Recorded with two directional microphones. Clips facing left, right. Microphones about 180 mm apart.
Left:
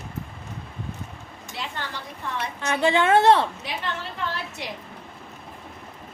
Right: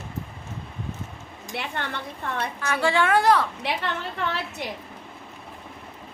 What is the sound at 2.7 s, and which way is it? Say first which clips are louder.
Speech: left 2 dB; 20° left (ahead or behind).